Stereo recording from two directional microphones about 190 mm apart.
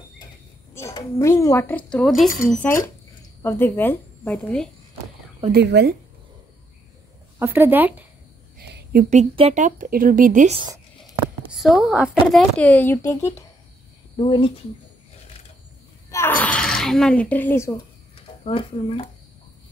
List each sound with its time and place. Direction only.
0.7 s speech: 15° left (ahead or behind); by 2.6 s centre (ahead or behind)
2.6 s speech: 15° left (ahead or behind)
5.5 s speech: 65° right (ahead or behind)
7.3 s speech: 10° right (ahead or behind)
8.5 s a sound: 55° right (ahead or behind)
9.1 s speech: 30° right (ahead or behind)
11.5 s a woman's voice: centre (ahead or behind); by 13.3 s 15° left (ahead or behind)
14.1 s speech: 25° left (ahead or behind)
16.1 s a woman's voice: 10° left (ahead or behind)
18.4 s speech: 30° left (ahead or behind)